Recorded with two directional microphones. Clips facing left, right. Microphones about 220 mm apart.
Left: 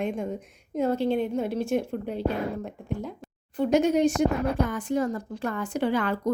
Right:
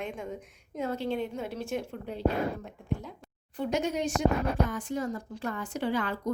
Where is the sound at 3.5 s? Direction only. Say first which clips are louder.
Left 8 dB; 55° left (ahead or behind).